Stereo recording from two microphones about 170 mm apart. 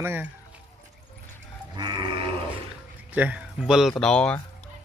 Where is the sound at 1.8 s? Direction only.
25° right (ahead or behind).